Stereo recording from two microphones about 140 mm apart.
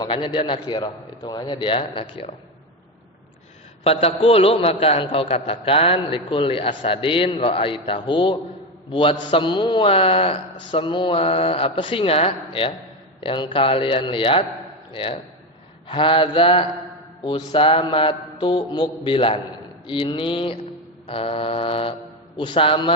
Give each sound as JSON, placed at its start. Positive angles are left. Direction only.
{"t": 0.0, "sound": "a man's voice", "side_deg": 35}
{"t": 3.8, "sound": "a man's voice", "side_deg": 45}